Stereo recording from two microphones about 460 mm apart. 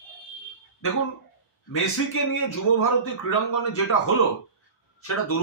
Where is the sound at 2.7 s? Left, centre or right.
Left.